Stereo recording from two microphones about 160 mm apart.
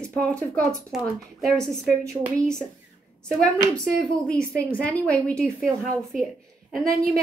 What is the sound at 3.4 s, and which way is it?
A woman's voice, 5° left (ahead or behind).